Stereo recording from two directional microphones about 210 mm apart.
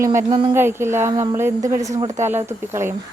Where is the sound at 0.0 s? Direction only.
15° right (ahead or behind).